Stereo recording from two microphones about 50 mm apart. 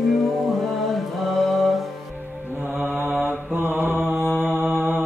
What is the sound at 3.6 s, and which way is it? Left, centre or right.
Mantra, right.